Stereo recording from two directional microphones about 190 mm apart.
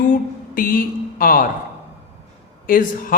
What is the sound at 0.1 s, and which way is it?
Mantra, 45° left (ahead or behind).